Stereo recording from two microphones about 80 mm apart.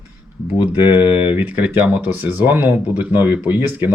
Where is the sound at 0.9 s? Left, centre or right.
Right.